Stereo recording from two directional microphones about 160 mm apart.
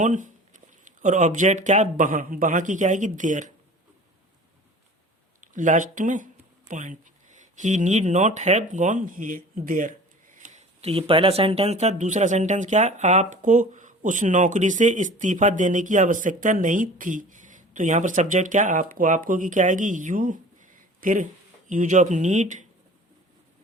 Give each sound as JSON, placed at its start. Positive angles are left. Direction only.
{"t": 0.0, "sound": "speech", "side_deg": -50}
{"t": 5.4, "sound": "speech", "side_deg": -55}